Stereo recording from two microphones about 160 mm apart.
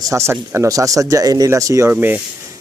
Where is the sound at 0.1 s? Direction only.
15° right (ahead or behind).